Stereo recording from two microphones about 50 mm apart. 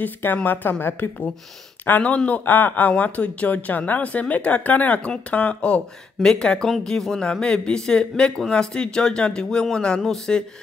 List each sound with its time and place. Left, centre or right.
0.0 s speech: left
1.9 s speech: left
6.2 s speech: centre